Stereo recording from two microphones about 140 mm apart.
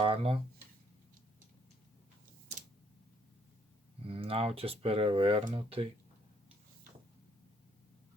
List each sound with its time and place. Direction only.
0.0 s speech: 40° right (ahead or behind)
4.0 s speech: 40° right (ahead or behind)